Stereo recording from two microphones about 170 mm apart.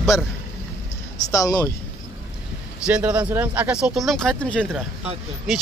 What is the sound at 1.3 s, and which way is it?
Speech, 20° left (ahead or behind).